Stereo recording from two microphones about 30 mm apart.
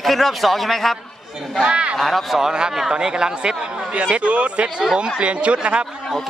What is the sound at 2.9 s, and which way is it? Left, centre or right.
Speech, right.